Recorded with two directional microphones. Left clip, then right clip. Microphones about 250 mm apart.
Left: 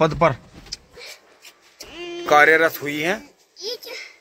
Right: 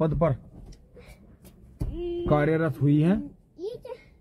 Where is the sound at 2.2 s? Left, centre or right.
Centre.